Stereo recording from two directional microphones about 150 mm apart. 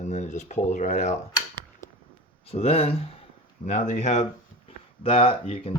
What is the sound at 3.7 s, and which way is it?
Speech, 55° left (ahead or behind).